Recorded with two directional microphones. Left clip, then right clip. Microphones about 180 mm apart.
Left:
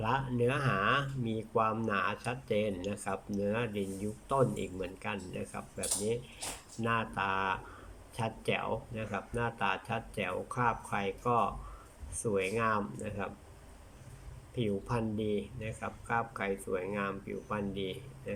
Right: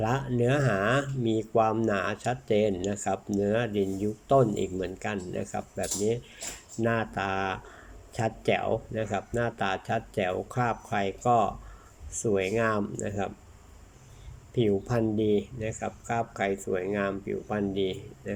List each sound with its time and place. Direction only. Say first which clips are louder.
0.0 s speech: right 4 dB; 25° right (ahead or behind)
14.5 s speech: right 8 dB; 25° right (ahead or behind)